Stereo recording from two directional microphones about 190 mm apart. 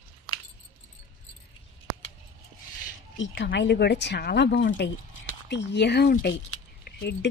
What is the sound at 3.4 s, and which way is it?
Speech, 65° left (ahead or behind).